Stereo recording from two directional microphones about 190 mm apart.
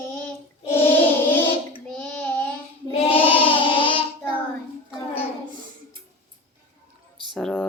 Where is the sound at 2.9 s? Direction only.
30° left (ahead or behind).